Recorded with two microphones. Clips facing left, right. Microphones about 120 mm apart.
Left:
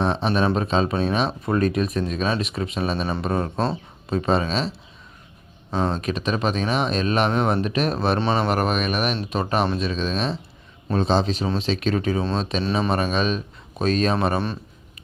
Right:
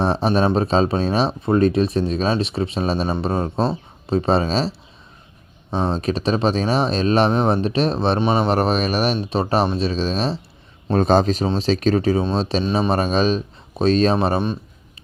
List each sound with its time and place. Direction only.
0.0 s speech: 35° right (ahead or behind)
5.7 s speech: 30° right (ahead or behind)
8.2 s speech: 15° right (ahead or behind)
8.4 s speech: 30° right (ahead or behind)
10.9 s a man's voice: 50° right (ahead or behind); by 14.6 s 20° right (ahead or behind)